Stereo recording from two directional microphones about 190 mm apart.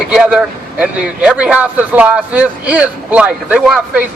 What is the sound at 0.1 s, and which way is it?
A man's voice, 5° right (ahead or behind).